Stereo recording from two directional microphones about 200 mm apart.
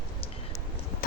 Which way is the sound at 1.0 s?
45° left (ahead or behind).